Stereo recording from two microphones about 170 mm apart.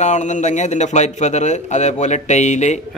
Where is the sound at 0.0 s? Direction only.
45° left (ahead or behind).